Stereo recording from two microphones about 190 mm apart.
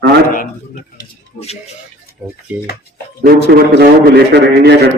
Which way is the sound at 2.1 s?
50° left (ahead or behind).